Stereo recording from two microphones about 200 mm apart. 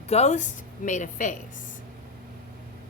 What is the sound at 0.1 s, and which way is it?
A woman's voice, 35° left (ahead or behind).